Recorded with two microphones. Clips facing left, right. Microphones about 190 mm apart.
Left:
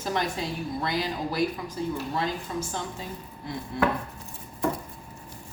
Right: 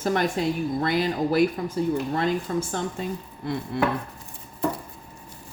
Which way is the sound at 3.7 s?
65° right (ahead or behind).